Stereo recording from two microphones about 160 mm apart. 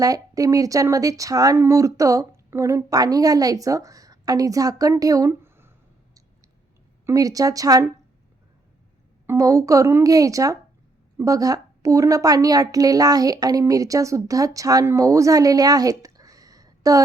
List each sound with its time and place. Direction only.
0.0 s a woman's voice: 20° right (ahead or behind)
7.0 s a woman's voice: 20° right (ahead or behind)
9.2 s a woman's voice: 15° right (ahead or behind)